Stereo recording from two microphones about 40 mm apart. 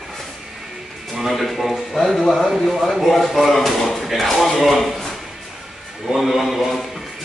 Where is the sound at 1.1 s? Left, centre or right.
Centre.